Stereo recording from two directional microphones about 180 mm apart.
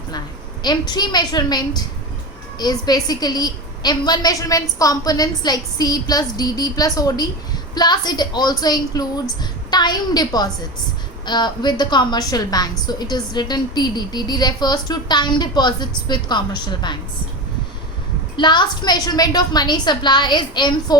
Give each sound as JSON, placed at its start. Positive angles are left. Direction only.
{"t": 0.6, "sound": "a woman's voice", "side_deg": 25}
{"t": 18.3, "sound": "a woman's voice", "side_deg": 25}